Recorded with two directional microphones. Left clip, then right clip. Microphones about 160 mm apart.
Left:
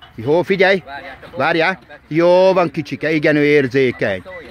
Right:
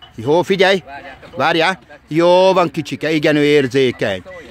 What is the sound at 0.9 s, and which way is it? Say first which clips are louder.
Speech: left 2 dB; 5° left (ahead or behind).